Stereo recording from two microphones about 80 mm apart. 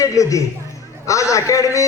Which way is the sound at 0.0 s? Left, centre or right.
Left.